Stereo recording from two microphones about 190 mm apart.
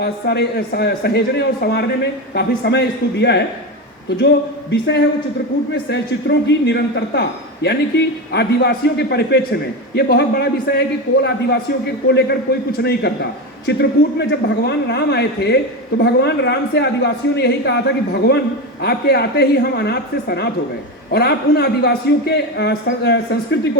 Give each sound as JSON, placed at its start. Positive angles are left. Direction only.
{"t": 0.0, "sound": "a man's voice", "side_deg": 55}
{"t": 5.9, "sound": "a man's voice", "side_deg": 65}